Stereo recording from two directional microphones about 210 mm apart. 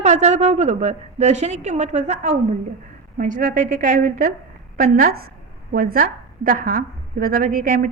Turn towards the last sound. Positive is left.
turn(degrees=-40)  # may be behind; listen again after turning